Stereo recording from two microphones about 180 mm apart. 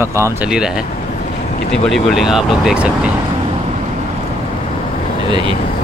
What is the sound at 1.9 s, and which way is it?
Speech, centre (ahead or behind).